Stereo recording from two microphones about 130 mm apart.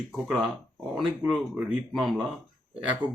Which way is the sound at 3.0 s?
40° left (ahead or behind).